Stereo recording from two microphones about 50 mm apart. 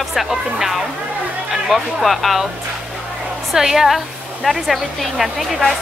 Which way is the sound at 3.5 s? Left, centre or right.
Centre.